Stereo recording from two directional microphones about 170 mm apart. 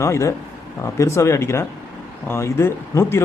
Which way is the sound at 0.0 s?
15° left (ahead or behind).